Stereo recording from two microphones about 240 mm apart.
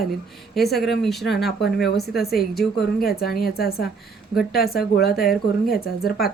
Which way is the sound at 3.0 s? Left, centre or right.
Left.